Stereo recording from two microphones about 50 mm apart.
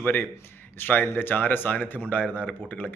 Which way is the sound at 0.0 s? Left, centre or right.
Left.